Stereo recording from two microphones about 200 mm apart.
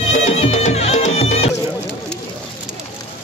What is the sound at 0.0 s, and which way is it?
Music, 35° left (ahead or behind).